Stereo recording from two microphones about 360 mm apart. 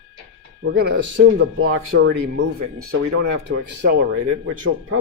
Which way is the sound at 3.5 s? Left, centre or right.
Right.